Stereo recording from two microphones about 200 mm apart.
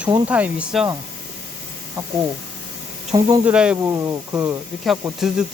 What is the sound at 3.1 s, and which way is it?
Speech, 20° right (ahead or behind).